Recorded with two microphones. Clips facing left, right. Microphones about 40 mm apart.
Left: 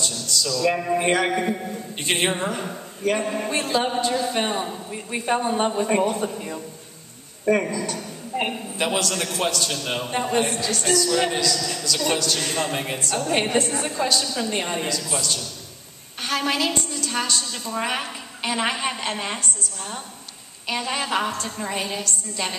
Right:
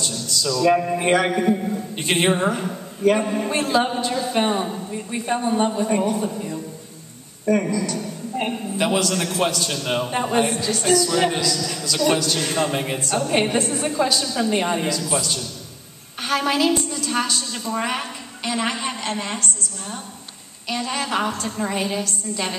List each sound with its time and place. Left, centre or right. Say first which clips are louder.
0.0 s a sound: right 1 dB; centre
0.6 s a man's voice: right 4 dB; centre
4.9 s a woman's voice: left 2 dB; centre
7.7 s a woman's voice: right 4 dB; left
8.5 s a man's voice: right 3 dB; centre
18.0 s a woman's voice: even; centre
20.6 s a woman's voice: right 1 dB; centre
21.2 s a man's voice: right 3 dB; centre